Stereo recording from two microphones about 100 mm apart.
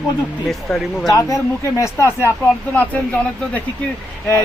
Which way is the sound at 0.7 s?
5° left (ahead or behind).